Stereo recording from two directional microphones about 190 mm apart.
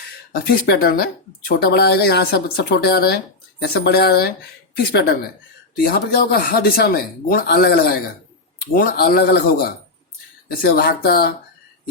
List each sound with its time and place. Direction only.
0.3 s speech: 55° left (ahead or behind)